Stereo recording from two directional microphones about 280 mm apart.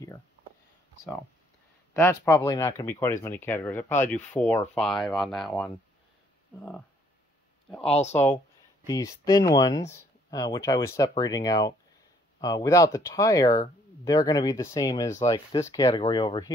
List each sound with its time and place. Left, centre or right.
2.0 s speech: centre
7.9 s speech: left
8.8 s speech: centre